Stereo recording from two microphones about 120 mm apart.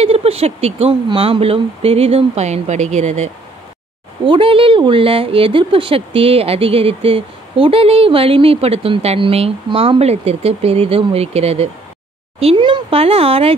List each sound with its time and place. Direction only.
0.0 s speech: 55° right (ahead or behind); by 3.3 s 70° right (ahead or behind)
4.3 s speech: 50° right (ahead or behind)